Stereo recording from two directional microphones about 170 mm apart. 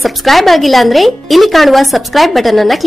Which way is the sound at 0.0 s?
Centre (ahead or behind).